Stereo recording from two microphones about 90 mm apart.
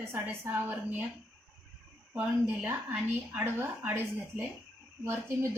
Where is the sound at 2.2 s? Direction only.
15° right (ahead or behind).